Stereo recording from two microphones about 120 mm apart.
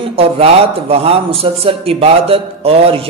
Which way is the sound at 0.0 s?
55° right (ahead or behind).